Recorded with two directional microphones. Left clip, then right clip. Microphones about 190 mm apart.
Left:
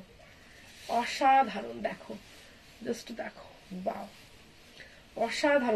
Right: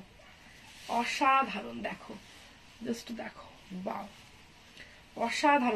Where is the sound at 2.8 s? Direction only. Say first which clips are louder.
Left 2 dB; 20° right (ahead or behind).